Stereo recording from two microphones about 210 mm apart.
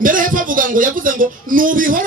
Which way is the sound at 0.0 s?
40° right (ahead or behind).